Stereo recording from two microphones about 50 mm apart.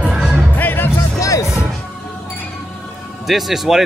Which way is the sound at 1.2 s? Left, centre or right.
Left.